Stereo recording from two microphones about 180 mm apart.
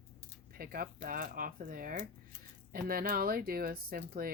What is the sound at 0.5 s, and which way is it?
Speech, 55° right (ahead or behind).